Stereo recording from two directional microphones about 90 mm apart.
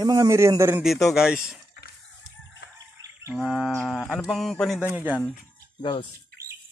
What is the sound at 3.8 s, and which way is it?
Mantra, 5° left (ahead or behind).